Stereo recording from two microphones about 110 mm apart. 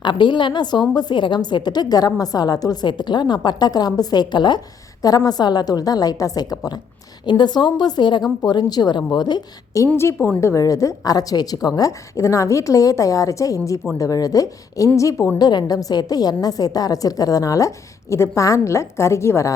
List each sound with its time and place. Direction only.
0.0 s a woman's voice: 45° left (ahead or behind)
9.8 s a woman's voice: 25° left (ahead or behind)